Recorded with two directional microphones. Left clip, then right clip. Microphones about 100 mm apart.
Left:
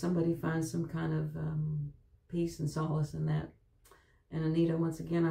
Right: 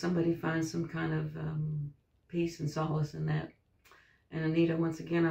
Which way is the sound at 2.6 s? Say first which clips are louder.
Even; 5° left (ahead or behind).